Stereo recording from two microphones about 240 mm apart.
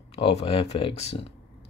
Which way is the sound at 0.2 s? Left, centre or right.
Left.